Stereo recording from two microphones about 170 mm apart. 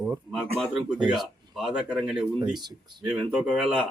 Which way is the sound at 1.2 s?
Centre (ahead or behind).